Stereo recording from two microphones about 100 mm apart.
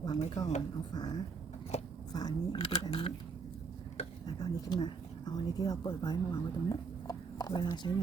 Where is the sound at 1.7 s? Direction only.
90° left.